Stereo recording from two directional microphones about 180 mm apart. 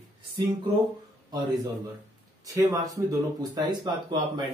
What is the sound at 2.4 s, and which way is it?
Speech, 20° right (ahead or behind).